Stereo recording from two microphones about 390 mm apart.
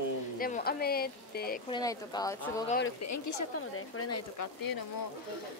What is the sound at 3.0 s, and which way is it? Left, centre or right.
Speech, left.